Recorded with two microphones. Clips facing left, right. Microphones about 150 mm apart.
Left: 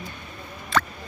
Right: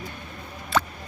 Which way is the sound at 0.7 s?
10° right (ahead or behind).